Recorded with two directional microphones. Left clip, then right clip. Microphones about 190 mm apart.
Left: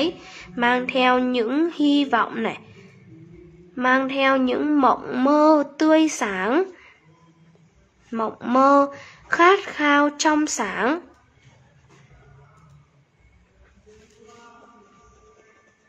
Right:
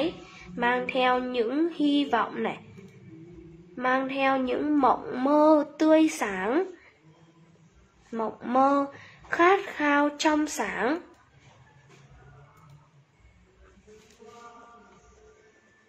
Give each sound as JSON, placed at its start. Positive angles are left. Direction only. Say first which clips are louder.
{"t": 0.6, "sound": "a woman's voice", "louder": "left 5 dB", "side_deg": 30}
{"t": 3.7, "sound": "a woman's voice", "louder": "left 6 dB", "side_deg": 30}
{"t": 8.1, "sound": "a woman's voice", "louder": "left 5 dB", "side_deg": 30}